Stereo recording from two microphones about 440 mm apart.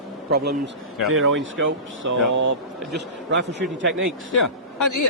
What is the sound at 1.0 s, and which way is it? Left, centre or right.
A man's voice, right.